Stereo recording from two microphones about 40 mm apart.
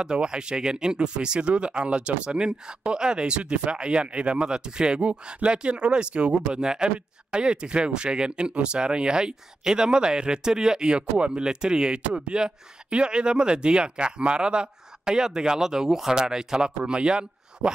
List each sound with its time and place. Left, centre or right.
0.0 s speech: right